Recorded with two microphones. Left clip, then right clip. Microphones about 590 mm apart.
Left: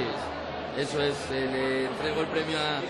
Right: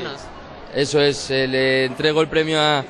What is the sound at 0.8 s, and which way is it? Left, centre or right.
A man's voice, right.